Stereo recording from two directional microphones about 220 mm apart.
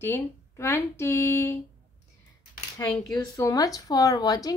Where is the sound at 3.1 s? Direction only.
15° left (ahead or behind).